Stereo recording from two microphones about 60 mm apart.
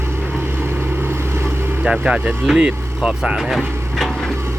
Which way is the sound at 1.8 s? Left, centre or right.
Centre.